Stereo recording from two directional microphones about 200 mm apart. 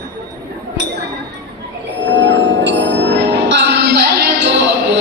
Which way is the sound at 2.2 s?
65° right (ahead or behind).